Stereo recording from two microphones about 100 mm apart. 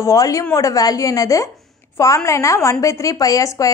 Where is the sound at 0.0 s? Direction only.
35° left (ahead or behind).